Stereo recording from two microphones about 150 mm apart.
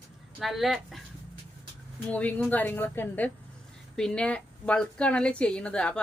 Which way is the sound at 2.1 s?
10° left (ahead or behind).